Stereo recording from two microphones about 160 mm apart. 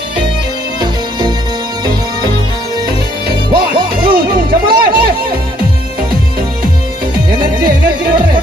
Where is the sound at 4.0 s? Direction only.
70° right (ahead or behind).